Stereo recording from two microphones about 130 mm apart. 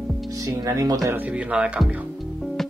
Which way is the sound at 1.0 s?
15° right (ahead or behind).